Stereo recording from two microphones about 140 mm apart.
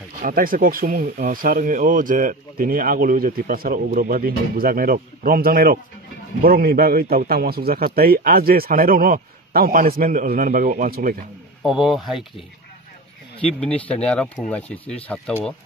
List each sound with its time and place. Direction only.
0.2 s speech: 90° right
11.6 s speech: centre (ahead or behind)
13.6 s speech: 10° left (ahead or behind)